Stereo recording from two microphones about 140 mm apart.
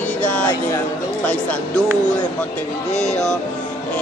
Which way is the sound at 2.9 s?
55° left (ahead or behind).